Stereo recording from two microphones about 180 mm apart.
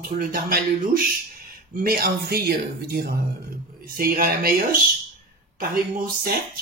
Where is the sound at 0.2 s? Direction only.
55° right (ahead or behind).